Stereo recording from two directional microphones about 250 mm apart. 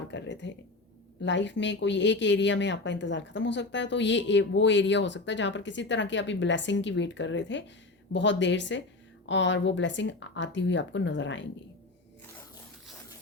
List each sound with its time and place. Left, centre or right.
0.1 s speech: left